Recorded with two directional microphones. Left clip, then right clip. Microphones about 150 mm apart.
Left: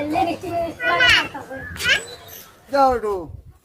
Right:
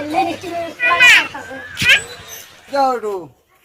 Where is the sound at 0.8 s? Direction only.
55° left (ahead or behind).